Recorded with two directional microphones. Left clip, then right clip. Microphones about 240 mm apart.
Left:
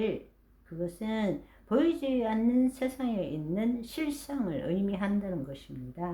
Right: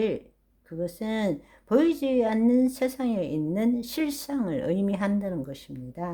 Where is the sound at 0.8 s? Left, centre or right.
Right.